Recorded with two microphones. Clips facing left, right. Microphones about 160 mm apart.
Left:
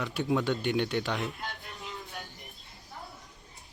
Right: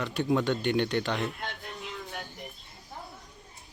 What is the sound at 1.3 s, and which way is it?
Music, 75° right (ahead or behind).